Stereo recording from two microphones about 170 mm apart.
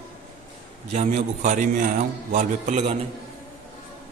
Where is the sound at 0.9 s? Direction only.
40° right (ahead or behind).